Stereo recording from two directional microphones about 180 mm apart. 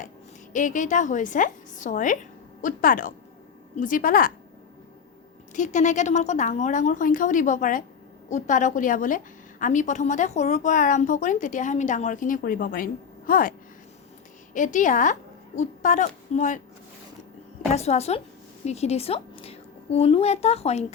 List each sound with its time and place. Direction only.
0.5 s a woman's voice: 45° left (ahead or behind)
5.5 s a woman's voice: 40° left (ahead or behind)
14.5 s a woman's voice: 45° left (ahead or behind)
17.7 s a woman's voice: 35° left (ahead or behind)